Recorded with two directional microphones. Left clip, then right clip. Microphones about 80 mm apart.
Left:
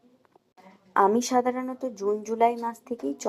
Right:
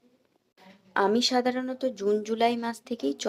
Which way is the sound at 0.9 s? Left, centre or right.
Centre.